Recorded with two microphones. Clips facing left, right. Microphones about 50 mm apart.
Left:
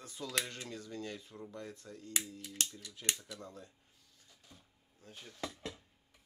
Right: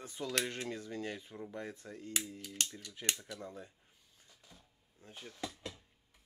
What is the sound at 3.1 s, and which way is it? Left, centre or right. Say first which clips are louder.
Speech: right 3 dB; centre.